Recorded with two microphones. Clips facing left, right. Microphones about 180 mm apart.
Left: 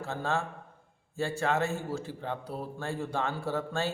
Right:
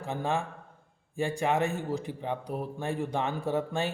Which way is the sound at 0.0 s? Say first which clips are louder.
Right 1 dB; 15° right (ahead or behind).